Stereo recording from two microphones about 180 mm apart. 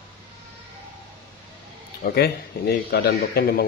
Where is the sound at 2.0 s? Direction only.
60° left (ahead or behind).